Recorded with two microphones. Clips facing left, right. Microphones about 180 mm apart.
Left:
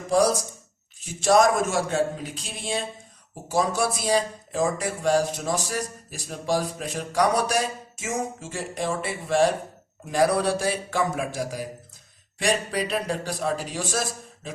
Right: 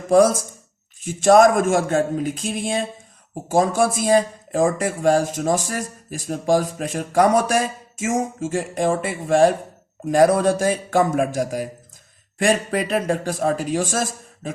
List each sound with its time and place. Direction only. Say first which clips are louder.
0.1 s speech: right 6 dB; 50° right (ahead or behind)